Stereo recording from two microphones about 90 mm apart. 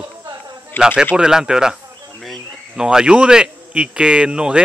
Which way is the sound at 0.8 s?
20° left (ahead or behind).